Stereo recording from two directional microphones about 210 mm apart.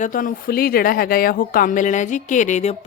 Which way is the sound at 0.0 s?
40° left (ahead or behind).